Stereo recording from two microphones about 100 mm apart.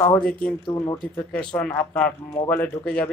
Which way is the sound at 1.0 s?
5° left (ahead or behind).